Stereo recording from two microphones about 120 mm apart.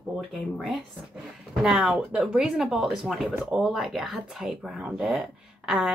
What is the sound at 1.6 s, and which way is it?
A woman's voice, centre (ahead or behind).